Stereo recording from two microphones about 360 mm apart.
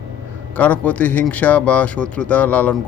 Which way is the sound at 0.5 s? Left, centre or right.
Centre.